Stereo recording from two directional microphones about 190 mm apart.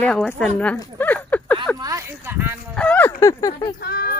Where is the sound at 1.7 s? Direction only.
20° right (ahead or behind).